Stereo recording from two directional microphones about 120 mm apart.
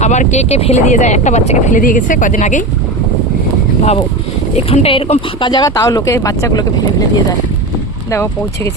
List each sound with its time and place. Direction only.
0.0 s speech: 75° left (ahead or behind)
4.5 s speech: 55° left (ahead or behind)
5.4 s speech: 40° left (ahead or behind)
8.1 s speech: 20° left (ahead or behind)